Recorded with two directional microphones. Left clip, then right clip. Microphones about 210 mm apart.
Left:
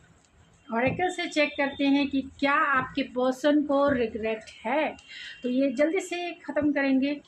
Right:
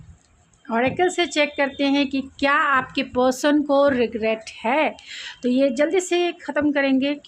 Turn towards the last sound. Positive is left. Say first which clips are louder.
# right 5 dB
turn(degrees=-50)  # may be behind; listen again after turning